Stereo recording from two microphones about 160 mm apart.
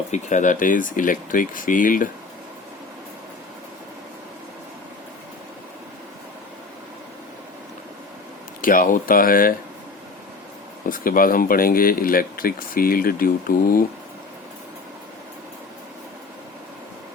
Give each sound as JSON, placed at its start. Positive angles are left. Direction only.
{"t": 0.1, "sound": "speech", "side_deg": 50}
{"t": 8.6, "sound": "speech", "side_deg": 60}
{"t": 10.8, "sound": "speech", "side_deg": 60}